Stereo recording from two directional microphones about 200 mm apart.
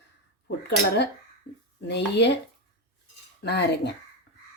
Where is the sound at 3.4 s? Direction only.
55° left (ahead or behind).